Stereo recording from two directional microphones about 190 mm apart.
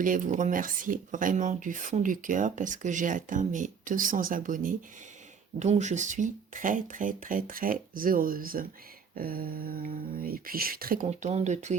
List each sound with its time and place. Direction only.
0.0 s speech: 45° right (ahead or behind)